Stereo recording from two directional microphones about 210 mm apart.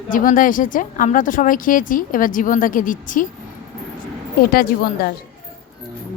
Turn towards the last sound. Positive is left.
turn(degrees=45)  # may be behind; listen again after turning